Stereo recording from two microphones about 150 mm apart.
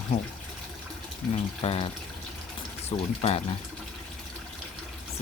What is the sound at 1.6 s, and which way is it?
Speech, 45° left (ahead or behind).